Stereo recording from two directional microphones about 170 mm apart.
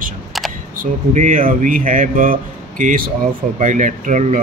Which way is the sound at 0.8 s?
50° right (ahead or behind).